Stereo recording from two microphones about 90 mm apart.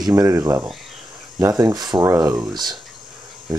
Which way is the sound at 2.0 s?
35° right (ahead or behind).